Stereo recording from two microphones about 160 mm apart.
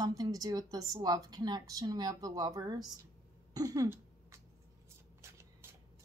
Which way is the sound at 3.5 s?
25° right (ahead or behind).